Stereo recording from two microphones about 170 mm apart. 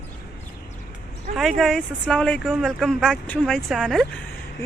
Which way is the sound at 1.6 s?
5° left (ahead or behind).